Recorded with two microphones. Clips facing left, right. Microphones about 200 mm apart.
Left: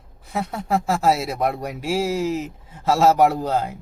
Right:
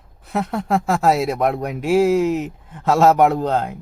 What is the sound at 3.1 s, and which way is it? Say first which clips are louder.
Speech: right 2 dB; 60° right (ahead or behind).